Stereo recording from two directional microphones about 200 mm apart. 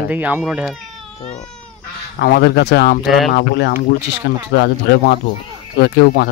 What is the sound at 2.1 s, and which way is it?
Speech, 50° left (ahead or behind).